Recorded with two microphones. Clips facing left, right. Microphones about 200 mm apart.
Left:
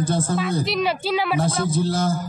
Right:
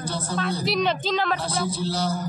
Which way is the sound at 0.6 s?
Centre (ahead or behind).